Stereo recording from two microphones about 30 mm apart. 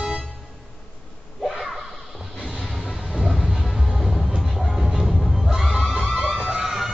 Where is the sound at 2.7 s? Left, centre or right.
Centre.